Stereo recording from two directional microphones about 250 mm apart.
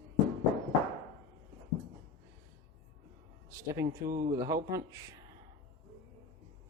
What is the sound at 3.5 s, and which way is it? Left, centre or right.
Speech, centre.